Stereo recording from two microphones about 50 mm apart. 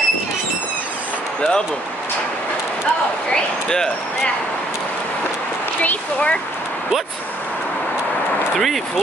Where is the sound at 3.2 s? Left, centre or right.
Centre.